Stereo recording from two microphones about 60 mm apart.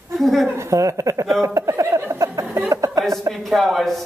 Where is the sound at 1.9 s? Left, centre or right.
Right.